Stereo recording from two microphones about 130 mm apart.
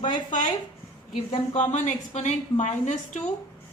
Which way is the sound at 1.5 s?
65° left (ahead or behind).